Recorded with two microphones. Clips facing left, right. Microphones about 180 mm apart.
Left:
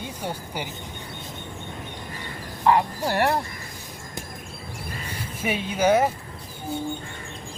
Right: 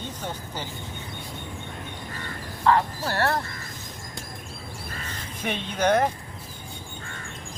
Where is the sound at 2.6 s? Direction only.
15° left (ahead or behind).